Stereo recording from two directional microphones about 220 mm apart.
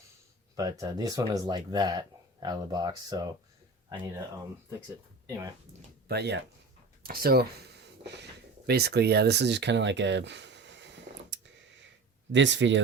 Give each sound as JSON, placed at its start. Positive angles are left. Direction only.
{"t": 0.5, "sound": "speech", "side_deg": -15}
{"t": 6.1, "sound": "speech", "side_deg": -50}
{"t": 12.3, "sound": "speech", "side_deg": -55}